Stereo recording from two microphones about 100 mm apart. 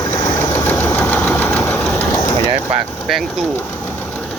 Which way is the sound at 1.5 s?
20° left (ahead or behind).